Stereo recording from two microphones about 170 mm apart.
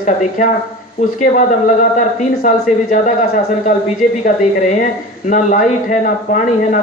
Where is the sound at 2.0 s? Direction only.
50° left (ahead or behind).